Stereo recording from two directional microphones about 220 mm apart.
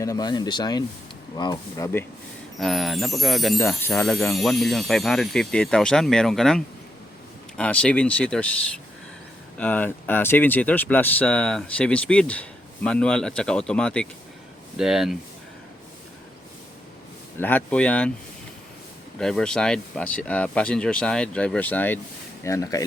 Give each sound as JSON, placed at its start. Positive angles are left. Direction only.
{"t": 0.0, "sound": "speech", "side_deg": 15}
{"t": 2.6, "sound": "speech", "side_deg": 0}
{"t": 9.6, "sound": "speech", "side_deg": 5}
{"t": 17.3, "sound": "speech", "side_deg": 10}
{"t": 19.2, "sound": "speech", "side_deg": 5}